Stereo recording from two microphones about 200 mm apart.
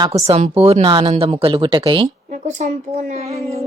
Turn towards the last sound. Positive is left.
turn(degrees=-30)  # may be behind; listen again after turning